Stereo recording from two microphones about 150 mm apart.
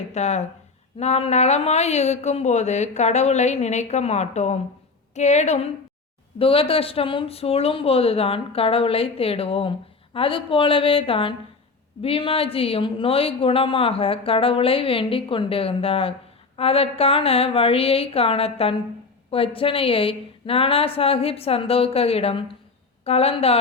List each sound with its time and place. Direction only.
0.1 s speech: 45° left (ahead or behind)